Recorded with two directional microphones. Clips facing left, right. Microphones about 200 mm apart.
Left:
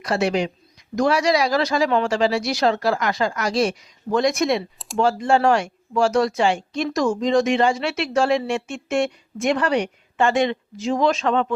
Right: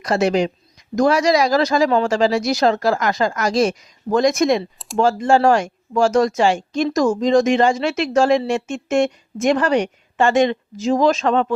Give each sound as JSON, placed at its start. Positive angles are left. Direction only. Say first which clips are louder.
{"t": 0.0, "sound": "speech", "louder": "right 4 dB", "side_deg": -45}